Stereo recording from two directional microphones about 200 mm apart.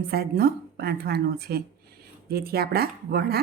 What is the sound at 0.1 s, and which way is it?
A woman's voice, 50° right (ahead or behind).